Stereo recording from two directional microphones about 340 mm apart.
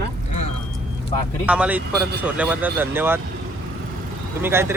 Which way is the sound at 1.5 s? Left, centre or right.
Centre.